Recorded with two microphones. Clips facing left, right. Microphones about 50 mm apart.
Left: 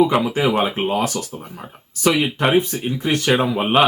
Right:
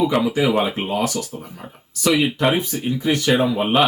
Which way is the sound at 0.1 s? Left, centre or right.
Left.